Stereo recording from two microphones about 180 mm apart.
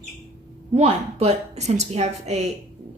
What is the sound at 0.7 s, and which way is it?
Speech, 35° right (ahead or behind).